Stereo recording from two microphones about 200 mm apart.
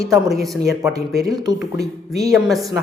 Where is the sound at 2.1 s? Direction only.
15° right (ahead or behind).